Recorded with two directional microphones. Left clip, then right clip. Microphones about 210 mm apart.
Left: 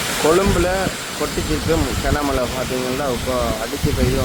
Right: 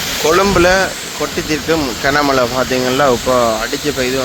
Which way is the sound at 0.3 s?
15° right (ahead or behind).